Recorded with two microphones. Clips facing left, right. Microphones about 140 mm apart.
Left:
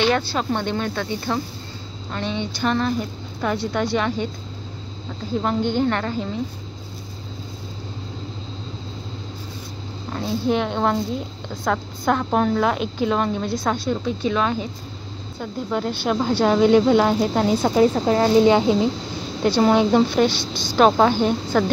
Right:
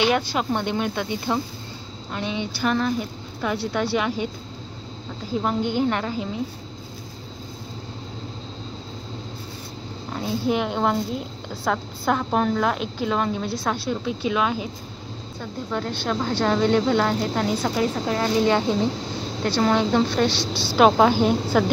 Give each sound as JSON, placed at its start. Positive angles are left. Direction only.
{"t": 0.0, "sound": "a woman's voice", "side_deg": -15}
{"t": 5.4, "sound": "speech", "side_deg": -5}
{"t": 10.1, "sound": "a woman's voice", "side_deg": -10}
{"t": 15.7, "sound": "a woman's voice", "side_deg": 10}
{"t": 18.4, "sound": "a woman's voice", "side_deg": 15}
{"t": 20.1, "sound": "a woman's voice", "side_deg": 5}